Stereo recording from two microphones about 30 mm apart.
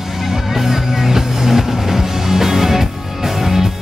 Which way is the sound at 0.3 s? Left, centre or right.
Centre.